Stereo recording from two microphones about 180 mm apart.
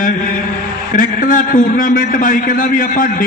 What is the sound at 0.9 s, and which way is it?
A man's voice, 45° left (ahead or behind).